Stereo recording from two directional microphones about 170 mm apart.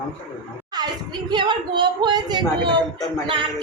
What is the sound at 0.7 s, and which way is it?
Speech, 25° right (ahead or behind).